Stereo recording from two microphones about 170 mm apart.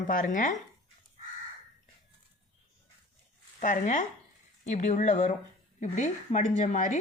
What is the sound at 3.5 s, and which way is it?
Speech, 50° left (ahead or behind).